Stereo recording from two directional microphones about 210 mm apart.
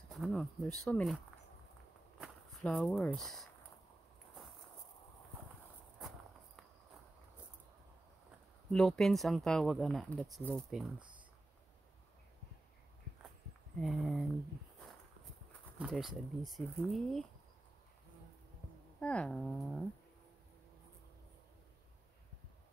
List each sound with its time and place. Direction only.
0.1 s speech: centre (ahead or behind)
2.1 s speech: 5° left (ahead or behind)
5.9 s walk: centre (ahead or behind)
8.7 s speech: centre (ahead or behind)
11.0 s a sound: 20° right (ahead or behind)
13.7 s speech: 5° left (ahead or behind)
15.8 s speech: centre (ahead or behind)
18.9 s speech: 5° left (ahead or behind)